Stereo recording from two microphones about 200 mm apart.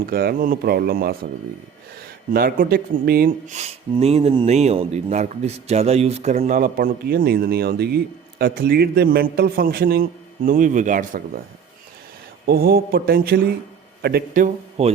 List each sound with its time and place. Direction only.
0.0 s speech: 50° right (ahead or behind)
12.5 s speech: 50° right (ahead or behind)
14.8 s speech: 30° right (ahead or behind)